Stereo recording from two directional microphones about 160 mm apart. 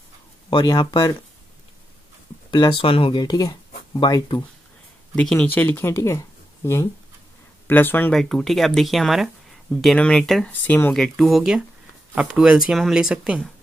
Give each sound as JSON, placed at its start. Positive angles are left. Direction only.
{"t": 0.5, "sound": "speech", "side_deg": 30}
{"t": 2.5, "sound": "speech", "side_deg": 30}
{"t": 5.1, "sound": "speech", "side_deg": 5}